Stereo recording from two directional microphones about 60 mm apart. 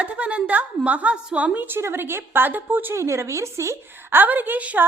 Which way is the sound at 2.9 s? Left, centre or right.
Right.